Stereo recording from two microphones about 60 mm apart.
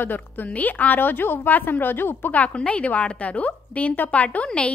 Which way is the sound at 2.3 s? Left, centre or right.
Left.